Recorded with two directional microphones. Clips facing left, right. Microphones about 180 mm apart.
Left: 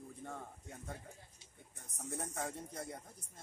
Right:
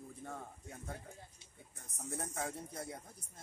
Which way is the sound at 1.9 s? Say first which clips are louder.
Even; centre (ahead or behind).